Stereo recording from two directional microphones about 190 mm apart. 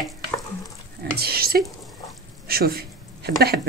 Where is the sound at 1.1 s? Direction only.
55° right (ahead or behind).